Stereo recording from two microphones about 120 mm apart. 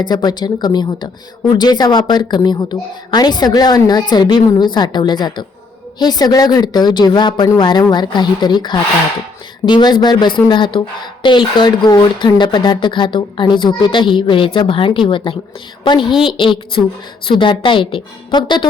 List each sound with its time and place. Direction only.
0.0 s a woman's voice: 35° left (ahead or behind)